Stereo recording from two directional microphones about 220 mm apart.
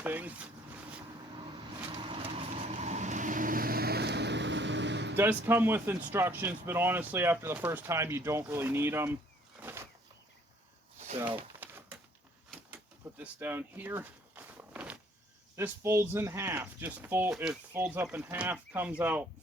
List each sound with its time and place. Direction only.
0.0 s speech: 10° right (ahead or behind)
1.5 s vehicle: 25° right (ahead or behind); by 5.1 s 50° right (ahead or behind)
5.1 s speech: 10° right (ahead or behind)
9.6 s a sound: 10° right (ahead or behind)
11.2 s a sound: 10° right (ahead or behind)
12.5 s door: 5° right (ahead or behind)
15.5 s speech: 10° right (ahead or behind)